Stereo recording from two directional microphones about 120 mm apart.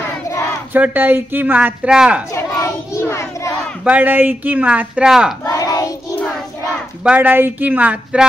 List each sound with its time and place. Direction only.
0.7 s speech: 15° right (ahead or behind)
2.3 s child singing: 20° left (ahead or behind)
3.8 s speech: 15° right (ahead or behind)
5.4 s a sound: 30° left (ahead or behind)
7.0 s speech: 10° right (ahead or behind)